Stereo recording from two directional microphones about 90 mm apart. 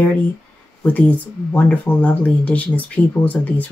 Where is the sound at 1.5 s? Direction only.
15° left (ahead or behind).